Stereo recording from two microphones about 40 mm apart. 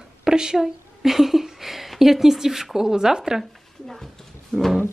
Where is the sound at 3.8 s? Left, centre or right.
Centre.